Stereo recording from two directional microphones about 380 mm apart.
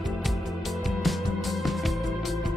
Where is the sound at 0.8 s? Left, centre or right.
Centre.